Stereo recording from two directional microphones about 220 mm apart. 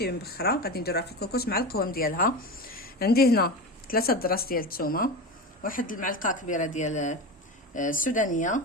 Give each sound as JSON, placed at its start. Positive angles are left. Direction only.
{"t": 0.0, "sound": "speech", "side_deg": 45}